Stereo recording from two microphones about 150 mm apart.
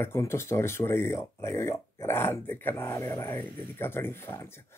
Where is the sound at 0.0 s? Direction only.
15° left (ahead or behind).